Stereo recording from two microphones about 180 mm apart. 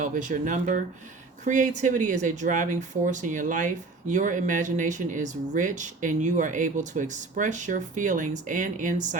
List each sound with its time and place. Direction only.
0.0 s speech: 45° right (ahead or behind)